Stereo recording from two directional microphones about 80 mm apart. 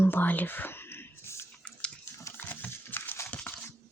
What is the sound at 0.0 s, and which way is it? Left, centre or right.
Whispering, left.